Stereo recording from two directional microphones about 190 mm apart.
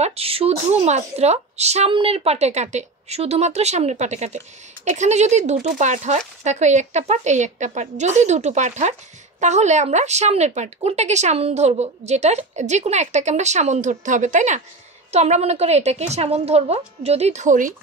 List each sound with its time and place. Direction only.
0.0 s speech: 30° right (ahead or behind)